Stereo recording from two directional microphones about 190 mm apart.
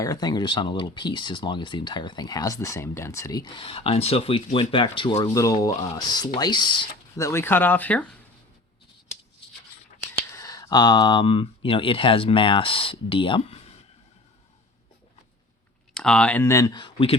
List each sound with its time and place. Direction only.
0.0 s speech: 20° left (ahead or behind)
10.3 s speech: 20° left (ahead or behind)
16.0 s speech: 5° left (ahead or behind); by 17.2 s 25° left (ahead or behind)